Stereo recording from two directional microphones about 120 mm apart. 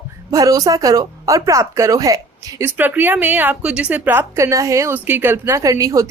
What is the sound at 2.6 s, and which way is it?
Speech, 15° right (ahead or behind).